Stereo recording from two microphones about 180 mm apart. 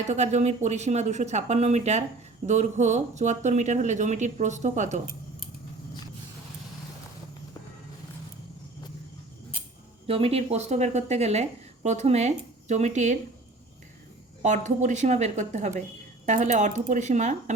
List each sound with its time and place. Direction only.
0.0 s speech: 40° right (ahead or behind)
10.1 s speech: 30° right (ahead or behind)
14.4 s speech: 45° right (ahead or behind)